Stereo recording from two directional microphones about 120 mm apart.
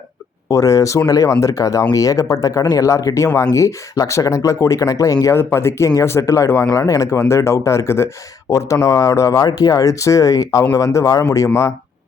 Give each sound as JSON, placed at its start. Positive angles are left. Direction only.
{"t": 0.5, "sound": "speech", "side_deg": 30}